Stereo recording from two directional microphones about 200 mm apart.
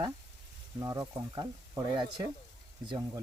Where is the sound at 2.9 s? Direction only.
20° right (ahead or behind).